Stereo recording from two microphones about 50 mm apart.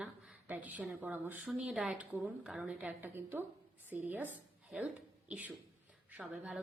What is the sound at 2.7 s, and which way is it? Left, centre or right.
A woman's voice, right.